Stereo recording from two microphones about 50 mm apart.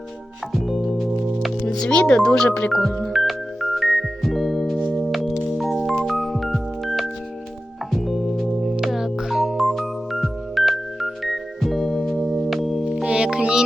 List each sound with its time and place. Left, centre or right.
0.5 s music: centre
1.9 s speech: left
2.1 s speech: centre
2.5 s speech: left
3.1 s music: centre
4.9 s chirp tone: centre
5.5 s music: centre
12.9 s music: centre